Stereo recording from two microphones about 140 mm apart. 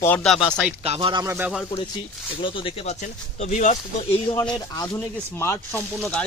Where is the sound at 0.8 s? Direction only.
45° right (ahead or behind).